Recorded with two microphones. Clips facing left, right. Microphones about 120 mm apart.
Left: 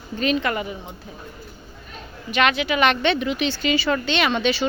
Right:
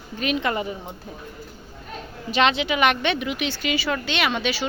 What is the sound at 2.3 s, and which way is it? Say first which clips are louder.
A woman's voice: even; 25° right (ahead or behind).